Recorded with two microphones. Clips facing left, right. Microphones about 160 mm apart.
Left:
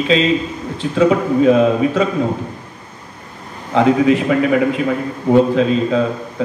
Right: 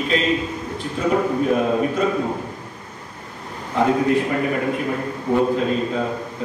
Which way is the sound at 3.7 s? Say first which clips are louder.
Left 5 dB; 90° left.